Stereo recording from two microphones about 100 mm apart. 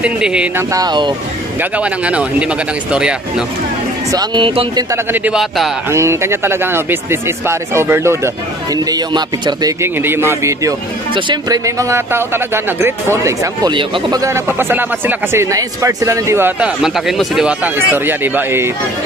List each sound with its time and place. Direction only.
0.0 s speech: 10° right (ahead or behind)
0.7 s speech: 45° right (ahead or behind)
1.6 s speech: 10° right (ahead or behind)
4.4 s speech: 65° right (ahead or behind)
4.9 s speech: 20° right (ahead or behind)
5.3 s speech: centre (ahead or behind)
5.9 s speech: 25° right (ahead or behind)
8.9 s speech: 40° right (ahead or behind)
9.8 s speech: 25° right (ahead or behind)
13.7 s speech: 50° right (ahead or behind)
14.2 s speech: 25° right (ahead or behind)
15.5 s speech: 30° right (ahead or behind)
16.5 s speech: 5° right (ahead or behind)
17.7 s speech: 20° right (ahead or behind)